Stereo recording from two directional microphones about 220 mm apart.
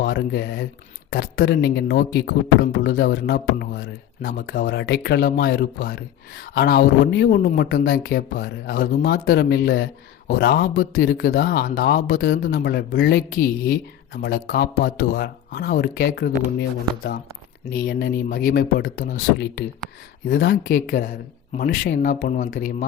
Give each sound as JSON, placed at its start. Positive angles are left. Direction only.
{"t": 0.0, "sound": "speech", "side_deg": 50}